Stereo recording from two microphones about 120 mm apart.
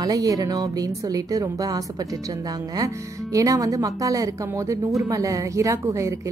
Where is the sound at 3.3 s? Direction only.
30° right (ahead or behind).